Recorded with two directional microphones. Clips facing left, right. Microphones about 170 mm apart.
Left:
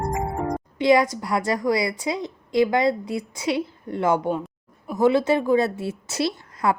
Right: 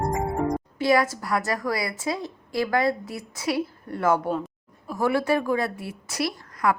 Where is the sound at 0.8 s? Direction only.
20° left (ahead or behind).